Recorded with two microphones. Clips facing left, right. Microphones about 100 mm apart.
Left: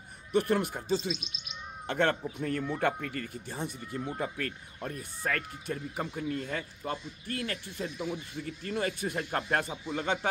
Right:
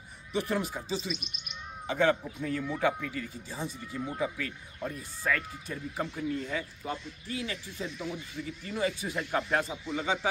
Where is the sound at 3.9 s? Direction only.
45° left (ahead or behind).